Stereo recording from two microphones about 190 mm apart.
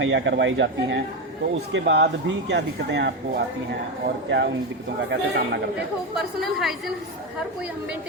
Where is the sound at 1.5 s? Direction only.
65° right (ahead or behind).